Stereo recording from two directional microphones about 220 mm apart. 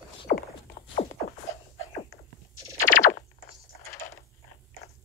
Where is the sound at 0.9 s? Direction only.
35° left (ahead or behind).